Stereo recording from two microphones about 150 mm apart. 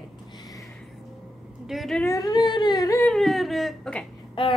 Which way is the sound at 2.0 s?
25° left (ahead or behind).